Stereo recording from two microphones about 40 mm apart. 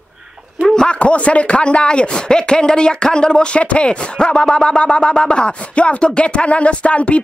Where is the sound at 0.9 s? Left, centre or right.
Left.